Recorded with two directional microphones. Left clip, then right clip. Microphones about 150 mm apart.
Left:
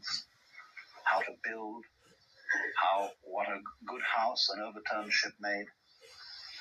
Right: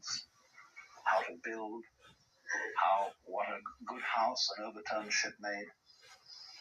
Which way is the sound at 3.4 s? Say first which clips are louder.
Left 3 dB; 30° left (ahead or behind).